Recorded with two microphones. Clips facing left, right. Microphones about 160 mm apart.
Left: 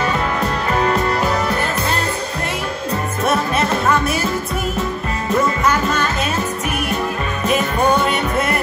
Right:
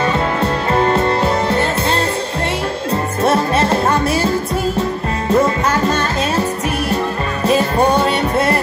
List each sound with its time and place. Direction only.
0.0 s music: 30° right (ahead or behind)
2.9 s music: 30° right (ahead or behind)
5.3 s music: 30° right (ahead or behind)
7.4 s music: 30° right (ahead or behind)